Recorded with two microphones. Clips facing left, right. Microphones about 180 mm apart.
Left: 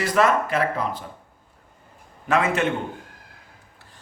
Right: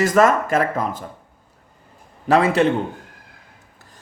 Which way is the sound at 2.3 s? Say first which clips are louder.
Right 6 dB; 35° right (ahead or behind).